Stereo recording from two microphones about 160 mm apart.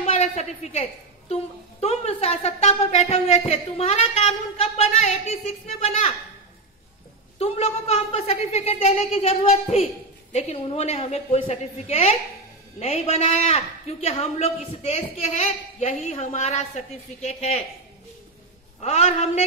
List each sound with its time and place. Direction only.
0.0 s a woman's voice: 40° left (ahead or behind)
7.3 s a man's voice: 40° left (ahead or behind)
18.8 s a man's voice: 45° left (ahead or behind)